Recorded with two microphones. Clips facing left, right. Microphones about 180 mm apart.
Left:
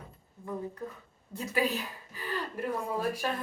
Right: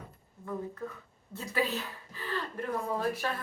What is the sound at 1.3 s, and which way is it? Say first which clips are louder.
A woman's voice: left 2 dB; 15° left (ahead or behind).